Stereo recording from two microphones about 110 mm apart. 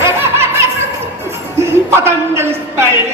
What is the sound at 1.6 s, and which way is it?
A man's voice, 25° right (ahead or behind).